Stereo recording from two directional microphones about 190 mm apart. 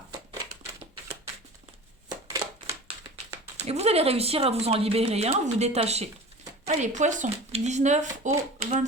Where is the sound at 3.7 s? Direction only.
35° right (ahead or behind).